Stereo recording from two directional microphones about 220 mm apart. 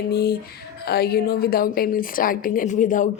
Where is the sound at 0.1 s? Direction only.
45° left (ahead or behind).